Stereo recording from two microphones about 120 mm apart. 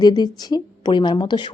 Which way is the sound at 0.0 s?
35° left (ahead or behind).